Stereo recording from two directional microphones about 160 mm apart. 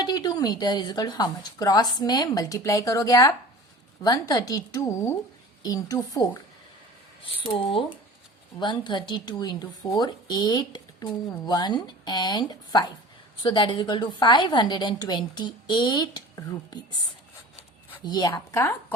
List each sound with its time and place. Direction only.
0.0 s speech: 25° left (ahead or behind)
8.6 s speech: 30° left (ahead or behind)
18.0 s speech: 25° left (ahead or behind)